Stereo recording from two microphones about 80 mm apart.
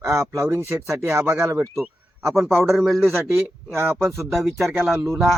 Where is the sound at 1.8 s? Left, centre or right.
Centre.